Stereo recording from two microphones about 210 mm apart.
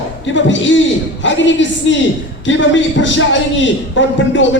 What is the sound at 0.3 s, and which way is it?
A man's voice, 60° left (ahead or behind).